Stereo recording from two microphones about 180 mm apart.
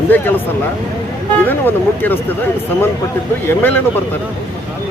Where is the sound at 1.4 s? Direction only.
10° left (ahead or behind).